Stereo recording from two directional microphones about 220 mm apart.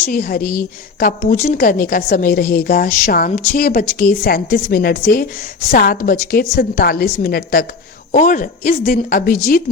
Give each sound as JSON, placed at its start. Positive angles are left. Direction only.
{"t": 0.1, "sound": "a woman's voice", "side_deg": 40}